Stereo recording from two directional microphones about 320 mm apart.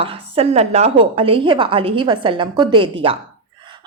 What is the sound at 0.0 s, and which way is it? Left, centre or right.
A woman's voice, centre.